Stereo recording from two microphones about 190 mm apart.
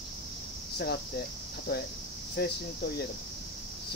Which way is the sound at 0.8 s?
60° left (ahead or behind).